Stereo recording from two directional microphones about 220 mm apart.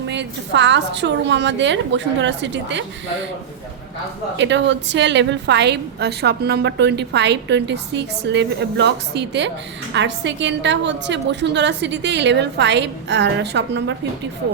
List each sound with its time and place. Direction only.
0.1 s a woman's voice: 55° right (ahead or behind)
4.4 s a woman's voice: 55° right (ahead or behind)